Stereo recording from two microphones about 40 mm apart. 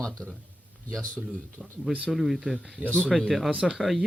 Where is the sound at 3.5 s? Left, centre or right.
Centre.